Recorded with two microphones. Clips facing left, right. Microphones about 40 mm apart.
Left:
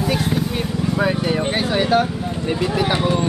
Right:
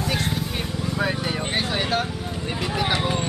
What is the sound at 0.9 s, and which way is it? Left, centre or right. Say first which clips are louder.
Vehicle: left 6 dB; centre.